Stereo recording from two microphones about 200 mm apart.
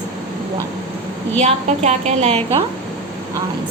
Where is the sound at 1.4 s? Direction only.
35° right (ahead or behind).